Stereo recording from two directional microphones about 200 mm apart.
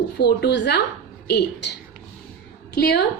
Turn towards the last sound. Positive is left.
turn(degrees=55)  # may be behind; listen again after turning